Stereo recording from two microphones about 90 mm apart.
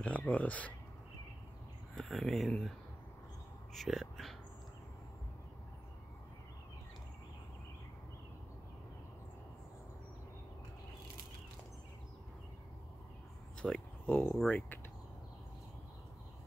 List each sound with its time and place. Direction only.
0.0 s speech: 15° left (ahead or behind)
2.0 s speech: 5° left (ahead or behind)
3.7 s speech: centre (ahead or behind)
13.6 s speech: 5° left (ahead or behind)
14.0 s speech: 20° left (ahead or behind)